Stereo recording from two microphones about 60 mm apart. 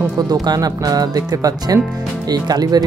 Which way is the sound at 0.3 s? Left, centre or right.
Right.